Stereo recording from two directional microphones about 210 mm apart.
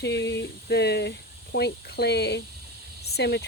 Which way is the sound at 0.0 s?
55° left (ahead or behind).